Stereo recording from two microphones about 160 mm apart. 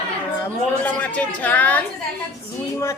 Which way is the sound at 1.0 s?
10° left (ahead or behind).